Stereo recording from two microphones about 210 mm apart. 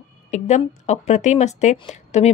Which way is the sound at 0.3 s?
35° left (ahead or behind).